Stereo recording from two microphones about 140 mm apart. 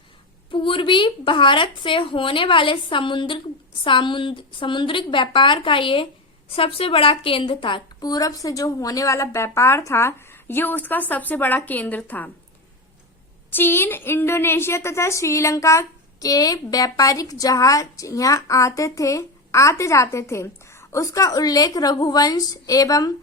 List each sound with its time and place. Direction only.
0.5 s a woman's voice: 40° left (ahead or behind); by 12.3 s 10° left (ahead or behind)
13.5 s a woman's voice: 15° left (ahead or behind)